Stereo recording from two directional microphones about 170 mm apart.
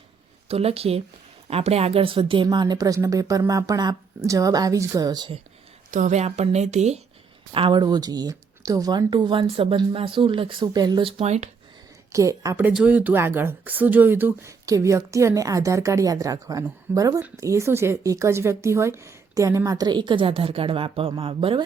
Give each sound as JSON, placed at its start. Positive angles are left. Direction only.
{"t": 0.4, "sound": "a woman's voice", "side_deg": -35}
{"t": 5.9, "sound": "a woman's voice", "side_deg": -45}
{"t": 7.5, "sound": "speech", "side_deg": -30}
{"t": 12.1, "sound": "speech", "side_deg": -20}